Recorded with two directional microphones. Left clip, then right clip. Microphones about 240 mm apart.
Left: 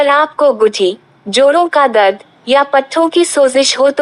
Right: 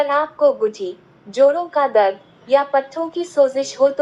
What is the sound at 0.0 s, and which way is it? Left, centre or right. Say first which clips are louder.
Speech: left 6 dB; left.